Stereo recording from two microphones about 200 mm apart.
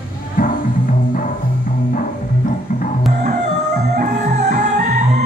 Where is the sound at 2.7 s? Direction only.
40° left (ahead or behind).